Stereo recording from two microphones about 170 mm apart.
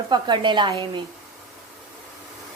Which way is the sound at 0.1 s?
25° right (ahead or behind).